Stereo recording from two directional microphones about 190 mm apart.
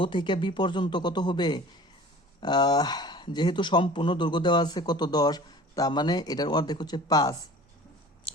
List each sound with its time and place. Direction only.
0.0 s speech: 25° left (ahead or behind)